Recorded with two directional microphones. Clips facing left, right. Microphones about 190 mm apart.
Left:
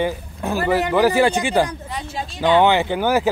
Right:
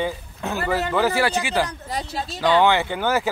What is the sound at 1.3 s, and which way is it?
Speech, 30° left (ahead or behind).